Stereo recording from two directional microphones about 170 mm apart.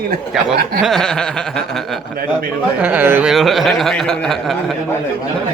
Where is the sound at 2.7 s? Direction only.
10° right (ahead or behind).